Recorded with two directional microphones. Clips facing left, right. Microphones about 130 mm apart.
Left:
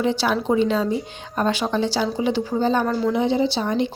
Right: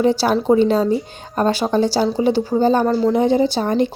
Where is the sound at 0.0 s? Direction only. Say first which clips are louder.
Right 5 dB; 40° right (ahead or behind).